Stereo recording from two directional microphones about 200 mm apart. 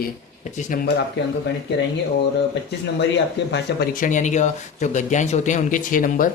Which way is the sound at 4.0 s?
40° left (ahead or behind).